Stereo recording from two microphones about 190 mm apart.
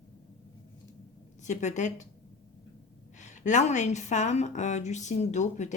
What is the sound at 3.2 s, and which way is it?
A woman's voice, 40° left (ahead or behind).